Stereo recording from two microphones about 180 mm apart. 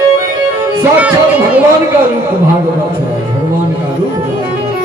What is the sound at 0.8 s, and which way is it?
Speech, 10° right (ahead or behind).